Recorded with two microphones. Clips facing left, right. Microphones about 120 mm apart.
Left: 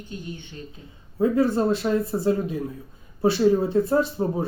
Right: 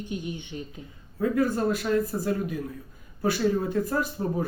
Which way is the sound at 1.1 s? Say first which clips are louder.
Left 4 dB; 25° left (ahead or behind).